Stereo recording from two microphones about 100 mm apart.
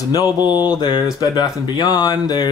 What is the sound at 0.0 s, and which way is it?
Speech, 35° left (ahead or behind).